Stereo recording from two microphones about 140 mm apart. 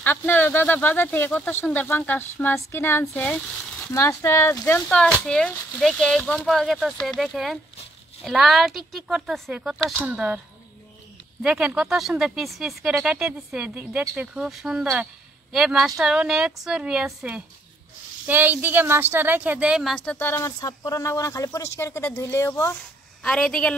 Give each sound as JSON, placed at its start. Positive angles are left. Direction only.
{"t": 0.0, "sound": "speech", "side_deg": 15}
{"t": 3.9, "sound": "speech", "side_deg": 20}
{"t": 4.8, "sound": "speech", "side_deg": 5}
{"t": 11.4, "sound": "speech", "side_deg": -5}
{"t": 20.1, "sound": "speech", "side_deg": 15}
{"t": 23.2, "sound": "speech", "side_deg": 5}